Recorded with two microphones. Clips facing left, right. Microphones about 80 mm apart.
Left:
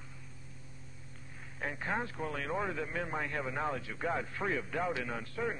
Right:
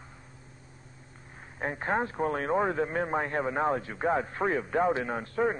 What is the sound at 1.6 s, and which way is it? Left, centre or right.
Speech, right.